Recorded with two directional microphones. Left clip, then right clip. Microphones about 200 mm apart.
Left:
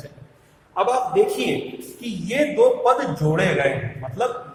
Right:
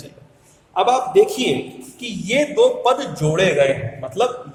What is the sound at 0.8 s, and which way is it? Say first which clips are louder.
A man's voice: right 4 dB; 55° right (ahead or behind).